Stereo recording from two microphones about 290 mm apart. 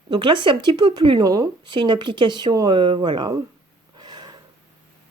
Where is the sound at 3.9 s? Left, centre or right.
Centre.